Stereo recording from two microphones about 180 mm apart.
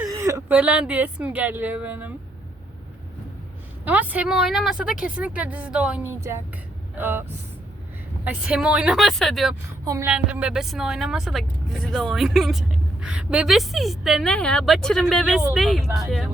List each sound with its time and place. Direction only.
0.0 s speech: 20° right (ahead or behind)
3.8 s speech: 10° right (ahead or behind)
9.8 s speech: 20° right (ahead or behind)
10.1 s speech: 5° right (ahead or behind)